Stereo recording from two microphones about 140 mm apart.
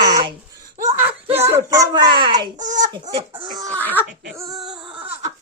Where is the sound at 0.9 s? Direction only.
15° right (ahead or behind); by 2.5 s 35° right (ahead or behind).